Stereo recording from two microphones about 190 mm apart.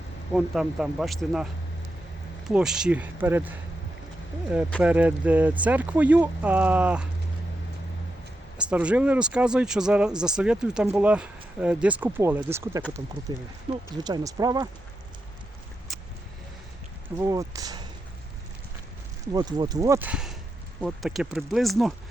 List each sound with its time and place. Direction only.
0.3 s speech: 5° right (ahead or behind)
2.5 s speech: 5° right (ahead or behind)
4.8 s speech: 10° right (ahead or behind)
8.5 s speech: 5° right (ahead or behind)
13.9 s speech: 20° right (ahead or behind)
17.2 s speech: 15° right (ahead or behind)
19.3 s speech: 20° right (ahead or behind); by 21.9 s centre (ahead or behind)